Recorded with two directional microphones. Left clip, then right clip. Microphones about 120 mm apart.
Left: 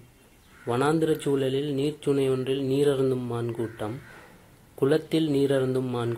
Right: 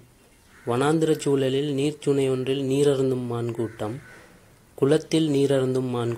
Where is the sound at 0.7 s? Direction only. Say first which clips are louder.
Right 2 dB; 35° right (ahead or behind).